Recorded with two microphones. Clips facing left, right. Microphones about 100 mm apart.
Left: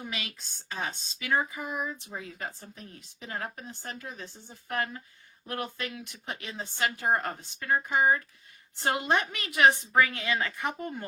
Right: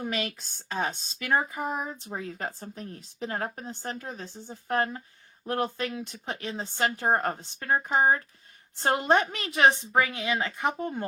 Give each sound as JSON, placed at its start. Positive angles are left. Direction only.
{"t": 0.0, "sound": "a woman's voice", "side_deg": -45}